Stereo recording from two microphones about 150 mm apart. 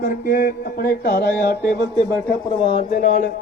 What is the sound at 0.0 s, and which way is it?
Music, 85° left.